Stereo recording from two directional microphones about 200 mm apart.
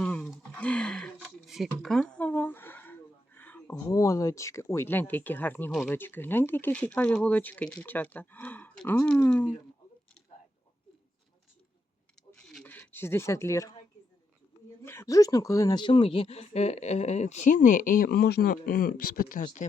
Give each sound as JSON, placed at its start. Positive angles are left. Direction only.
{"t": 0.0, "sound": "speech", "side_deg": 5}
{"t": 12.3, "sound": "a sound", "side_deg": 5}
{"t": 14.8, "sound": "speech", "side_deg": 15}